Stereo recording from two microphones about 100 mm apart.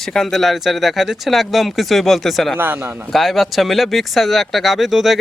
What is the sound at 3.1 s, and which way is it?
Speech, centre (ahead or behind).